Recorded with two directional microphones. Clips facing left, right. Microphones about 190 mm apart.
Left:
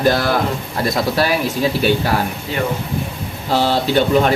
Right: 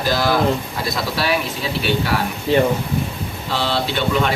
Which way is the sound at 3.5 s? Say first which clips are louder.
Left 5 dB; 45° left (ahead or behind).